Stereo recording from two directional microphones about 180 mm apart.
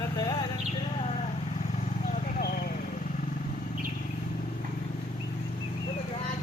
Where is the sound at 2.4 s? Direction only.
55° left (ahead or behind).